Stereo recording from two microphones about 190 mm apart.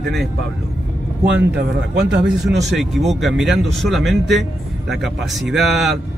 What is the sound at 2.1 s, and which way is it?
Speech, 70° right (ahead or behind).